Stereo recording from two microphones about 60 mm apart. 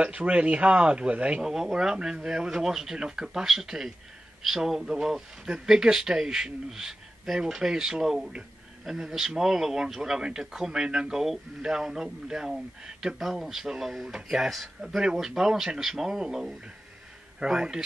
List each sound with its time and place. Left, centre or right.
0.0 s speech: centre